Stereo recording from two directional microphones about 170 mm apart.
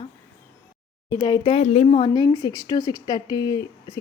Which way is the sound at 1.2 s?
25° left (ahead or behind).